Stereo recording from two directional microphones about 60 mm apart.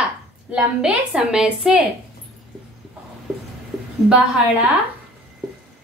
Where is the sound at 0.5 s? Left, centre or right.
Centre.